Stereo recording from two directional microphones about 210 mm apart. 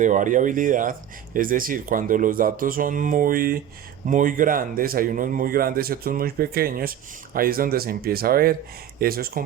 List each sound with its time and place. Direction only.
0.0 s speech: 40° right (ahead or behind)